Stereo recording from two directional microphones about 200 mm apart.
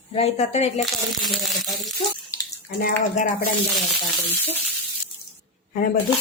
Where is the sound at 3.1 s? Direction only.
40° left (ahead or behind).